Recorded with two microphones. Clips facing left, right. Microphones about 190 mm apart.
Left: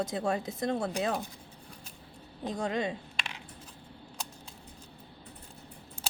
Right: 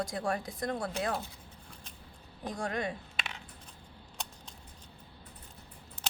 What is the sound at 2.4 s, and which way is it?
Speech, 20° left (ahead or behind).